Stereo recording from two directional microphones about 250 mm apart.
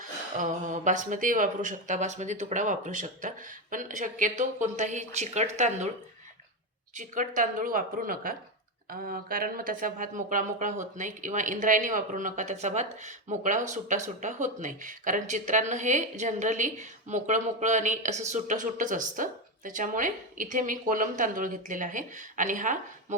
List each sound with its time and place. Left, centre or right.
0.0 s speech: right
6.9 s speech: right